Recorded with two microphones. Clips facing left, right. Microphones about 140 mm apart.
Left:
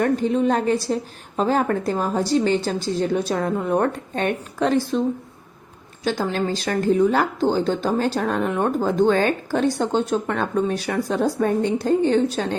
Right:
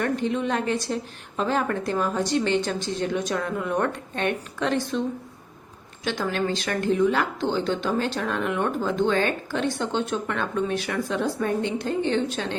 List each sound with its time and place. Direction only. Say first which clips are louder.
0.0 s speech: left 6 dB; 35° left (ahead or behind)
6.1 s speech: left 3 dB; 35° left (ahead or behind)